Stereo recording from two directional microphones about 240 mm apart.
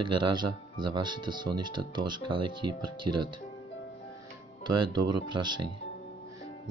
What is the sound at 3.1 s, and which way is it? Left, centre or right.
Speech, right.